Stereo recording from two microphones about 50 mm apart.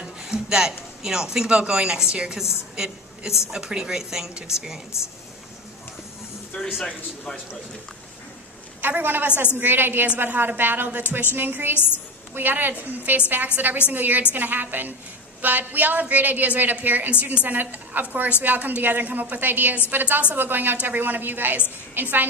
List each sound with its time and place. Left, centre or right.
0.0 s a sound: centre
1.0 s a woman's voice: centre
6.6 s a man's voice: centre
8.8 s a woman's voice: right